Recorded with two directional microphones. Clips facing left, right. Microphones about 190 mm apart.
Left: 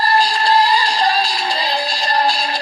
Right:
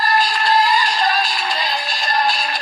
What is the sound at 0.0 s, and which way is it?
Synthetic singing, 35° left (ahead or behind).